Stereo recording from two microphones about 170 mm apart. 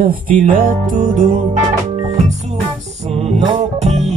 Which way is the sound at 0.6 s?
50° right (ahead or behind).